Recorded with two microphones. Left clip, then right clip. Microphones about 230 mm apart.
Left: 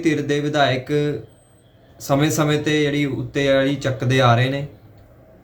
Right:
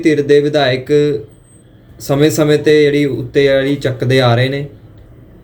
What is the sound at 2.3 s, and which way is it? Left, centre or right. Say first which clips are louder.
Speech: right 9 dB; centre.